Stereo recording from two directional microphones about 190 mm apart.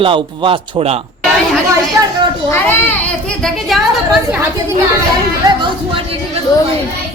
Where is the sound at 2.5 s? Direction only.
10° left (ahead or behind).